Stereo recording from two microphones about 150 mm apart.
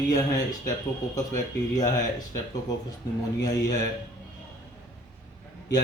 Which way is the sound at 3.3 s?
25° left (ahead or behind).